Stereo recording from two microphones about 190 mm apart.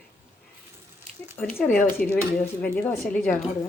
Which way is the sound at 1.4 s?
10° left (ahead or behind).